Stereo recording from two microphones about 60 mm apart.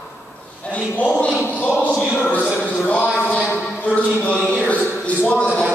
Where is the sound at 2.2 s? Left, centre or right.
Left.